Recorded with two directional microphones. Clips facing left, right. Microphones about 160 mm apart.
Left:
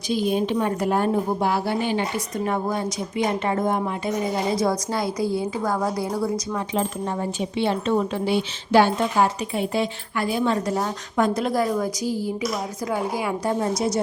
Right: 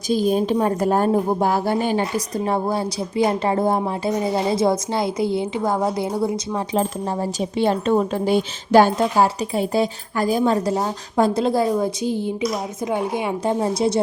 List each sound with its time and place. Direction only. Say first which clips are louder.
0.1 s a woman's voice: right 3 dB; 40° right (ahead or behind); by 6.6 s 25° right (ahead or behind)
6.7 s speech: right 3 dB; 35° right (ahead or behind)
10.7 s a woman's voice: right 3 dB; 25° right (ahead or behind)